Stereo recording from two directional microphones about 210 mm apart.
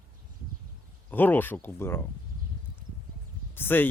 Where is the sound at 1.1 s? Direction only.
10° left (ahead or behind).